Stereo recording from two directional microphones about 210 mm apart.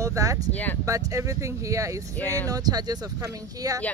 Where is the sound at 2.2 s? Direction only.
10° left (ahead or behind).